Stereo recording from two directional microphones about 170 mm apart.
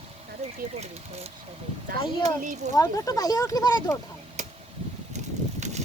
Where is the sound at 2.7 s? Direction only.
20° left (ahead or behind).